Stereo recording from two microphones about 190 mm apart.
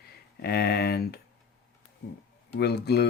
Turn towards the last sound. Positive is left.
turn(degrees=60)  # may be behind; listen again after turning